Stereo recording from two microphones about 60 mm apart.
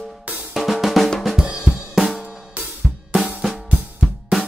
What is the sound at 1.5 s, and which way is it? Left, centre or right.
Music, centre.